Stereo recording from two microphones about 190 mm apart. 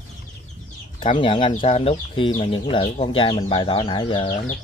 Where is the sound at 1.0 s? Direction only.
25° left (ahead or behind).